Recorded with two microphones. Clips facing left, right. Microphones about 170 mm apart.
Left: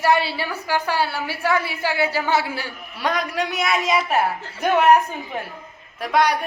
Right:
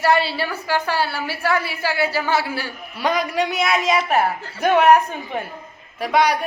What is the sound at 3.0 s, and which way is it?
A woman's voice, centre (ahead or behind).